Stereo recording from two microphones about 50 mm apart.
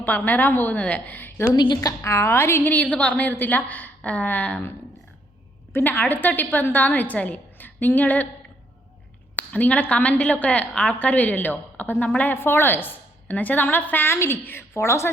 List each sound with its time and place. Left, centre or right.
0.0 s a woman's voice: left
0.8 s a woman's voice: left
2.0 s a woman's voice: left
2.6 s a woman's voice: left
5.7 s a woman's voice: left
9.3 s a woman's voice: left
12.3 s a woman's voice: left
14.1 s a woman's voice: left
14.7 s a woman's voice: left